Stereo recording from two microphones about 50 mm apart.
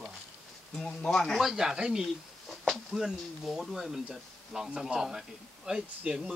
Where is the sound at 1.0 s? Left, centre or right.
Centre.